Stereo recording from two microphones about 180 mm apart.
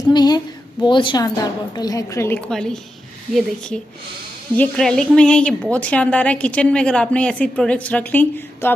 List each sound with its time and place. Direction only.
0.1 s a woman's voice: 20° left (ahead or behind)